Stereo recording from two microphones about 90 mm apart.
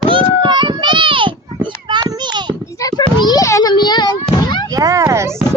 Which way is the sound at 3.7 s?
55° left (ahead or behind).